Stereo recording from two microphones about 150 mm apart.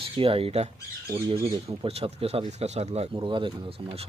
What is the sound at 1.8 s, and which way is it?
Speech, 40° right (ahead or behind).